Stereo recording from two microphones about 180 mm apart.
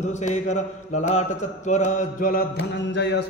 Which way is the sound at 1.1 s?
40° left (ahead or behind).